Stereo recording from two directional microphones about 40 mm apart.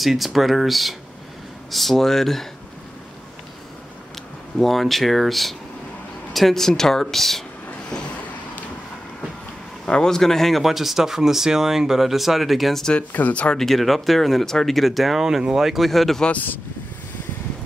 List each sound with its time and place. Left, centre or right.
0.0 s a woman's voice: centre
4.6 s a woman's voice: centre
9.8 s speech: centre
13.3 s speech: left
13.6 s speech: centre
15.8 s speech: centre